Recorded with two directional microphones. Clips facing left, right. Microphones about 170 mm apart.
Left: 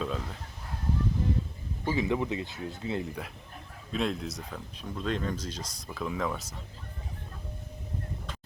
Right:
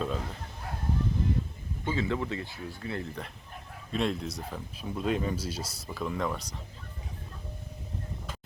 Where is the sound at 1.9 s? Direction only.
15° left (ahead or behind).